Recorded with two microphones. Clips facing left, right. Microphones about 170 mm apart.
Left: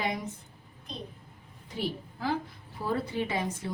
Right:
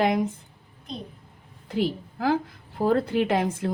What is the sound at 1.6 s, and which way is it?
A woman's voice, 90° right.